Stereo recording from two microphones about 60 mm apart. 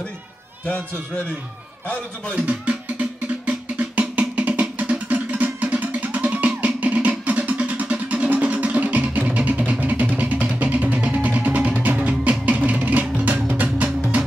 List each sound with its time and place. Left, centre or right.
0.7 s a man's voice: centre
2.3 s music: right